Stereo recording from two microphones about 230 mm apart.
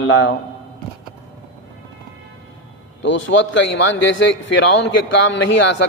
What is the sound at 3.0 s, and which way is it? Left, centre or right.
A man's voice, left.